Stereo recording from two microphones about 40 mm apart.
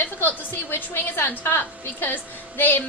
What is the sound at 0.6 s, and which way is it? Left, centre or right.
Speech, left.